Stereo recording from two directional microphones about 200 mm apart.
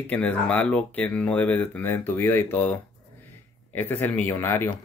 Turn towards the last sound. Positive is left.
turn(degrees=10)  # may be behind; listen again after turning